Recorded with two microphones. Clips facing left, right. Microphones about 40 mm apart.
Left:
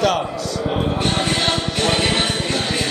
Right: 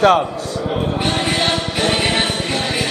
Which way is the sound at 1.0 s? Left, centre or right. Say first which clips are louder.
Right 1 dB; centre.